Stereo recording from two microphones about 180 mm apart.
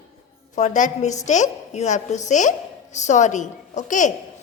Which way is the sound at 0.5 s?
40° left (ahead or behind).